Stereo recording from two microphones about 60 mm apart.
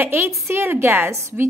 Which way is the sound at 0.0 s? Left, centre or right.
Right.